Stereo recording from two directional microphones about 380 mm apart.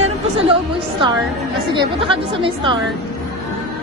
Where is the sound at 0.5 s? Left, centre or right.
Centre.